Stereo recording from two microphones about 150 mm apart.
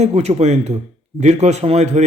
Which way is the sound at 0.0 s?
45° right (ahead or behind).